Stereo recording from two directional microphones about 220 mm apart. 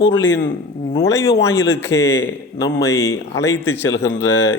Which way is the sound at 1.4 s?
15° left (ahead or behind).